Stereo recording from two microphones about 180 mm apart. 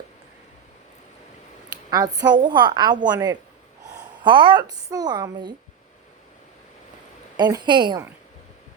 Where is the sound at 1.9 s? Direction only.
20° right (ahead or behind).